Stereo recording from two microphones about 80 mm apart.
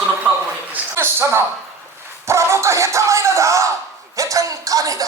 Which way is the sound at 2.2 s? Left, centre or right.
Right.